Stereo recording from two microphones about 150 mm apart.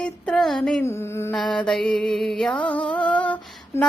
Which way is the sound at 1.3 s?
5° left (ahead or behind).